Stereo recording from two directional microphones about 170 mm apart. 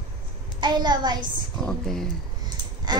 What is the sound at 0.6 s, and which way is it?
Speech, 25° right (ahead or behind).